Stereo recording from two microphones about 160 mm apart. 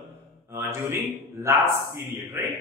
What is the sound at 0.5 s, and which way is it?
A man's voice, 15° right (ahead or behind).